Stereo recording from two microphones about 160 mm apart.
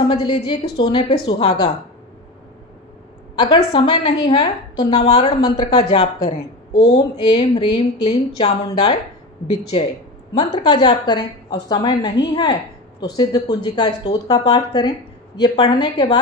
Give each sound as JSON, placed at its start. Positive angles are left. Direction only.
{"t": 0.1, "sound": "a woman's voice", "side_deg": 40}
{"t": 3.3, "sound": "a woman's voice", "side_deg": 30}
{"t": 10.3, "sound": "speech", "side_deg": 30}